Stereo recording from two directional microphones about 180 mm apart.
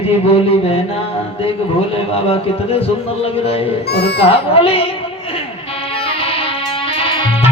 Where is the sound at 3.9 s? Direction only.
65° left (ahead or behind).